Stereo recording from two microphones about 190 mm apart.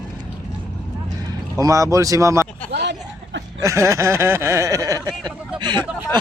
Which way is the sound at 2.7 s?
65° right (ahead or behind).